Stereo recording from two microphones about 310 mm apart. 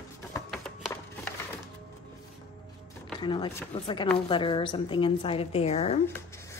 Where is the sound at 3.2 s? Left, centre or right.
Centre.